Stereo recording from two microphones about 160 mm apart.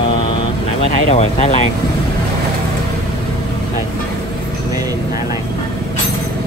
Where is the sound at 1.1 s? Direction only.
45° left (ahead or behind).